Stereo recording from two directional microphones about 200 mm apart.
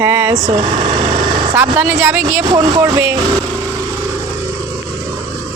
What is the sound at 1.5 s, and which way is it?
Speech, 10° right (ahead or behind).